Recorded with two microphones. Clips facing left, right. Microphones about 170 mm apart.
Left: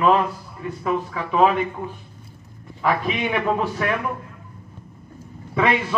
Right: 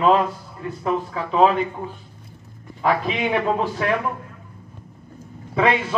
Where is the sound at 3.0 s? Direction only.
35° right (ahead or behind).